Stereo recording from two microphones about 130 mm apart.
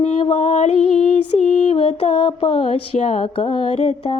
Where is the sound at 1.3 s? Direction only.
50° left (ahead or behind).